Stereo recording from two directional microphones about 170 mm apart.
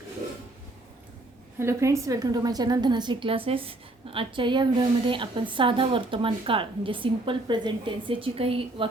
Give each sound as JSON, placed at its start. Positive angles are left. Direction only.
{"t": 1.5, "sound": "a woman's voice", "side_deg": -15}